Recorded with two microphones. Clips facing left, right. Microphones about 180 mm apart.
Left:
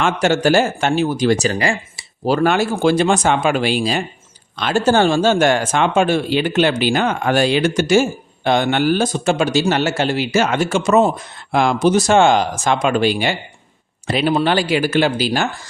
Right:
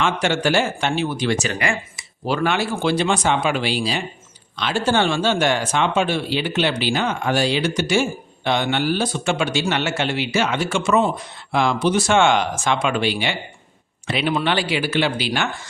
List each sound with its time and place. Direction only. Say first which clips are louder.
0.0 s speech: left 4 dB; 40° left (ahead or behind)